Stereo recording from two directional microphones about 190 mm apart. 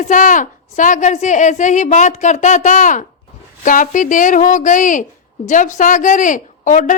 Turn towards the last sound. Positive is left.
turn(degrees=40)  # may be behind; listen again after turning